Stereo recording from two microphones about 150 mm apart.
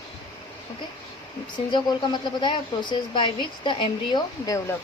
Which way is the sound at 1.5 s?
30° left (ahead or behind).